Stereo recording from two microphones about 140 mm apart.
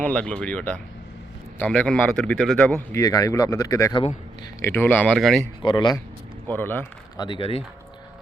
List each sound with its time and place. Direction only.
0.0 s speech: 10° left (ahead or behind)
2.9 s speech: 25° left (ahead or behind); by 5.4 s 5° left (ahead or behind)
5.6 s speech: 30° left (ahead or behind)
6.5 s speech: 15° left (ahead or behind)
7.2 s speech: 35° left (ahead or behind)